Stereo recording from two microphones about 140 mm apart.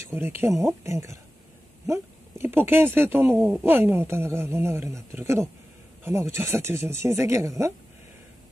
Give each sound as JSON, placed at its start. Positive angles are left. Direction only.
{"t": 0.1, "sound": "speech", "side_deg": -15}